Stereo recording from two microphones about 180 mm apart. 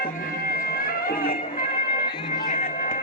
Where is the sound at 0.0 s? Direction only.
55° left (ahead or behind).